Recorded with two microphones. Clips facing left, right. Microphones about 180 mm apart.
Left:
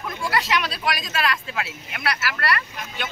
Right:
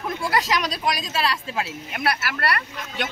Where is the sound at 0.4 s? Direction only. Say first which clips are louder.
Left 2 dB; 40° right (ahead or behind).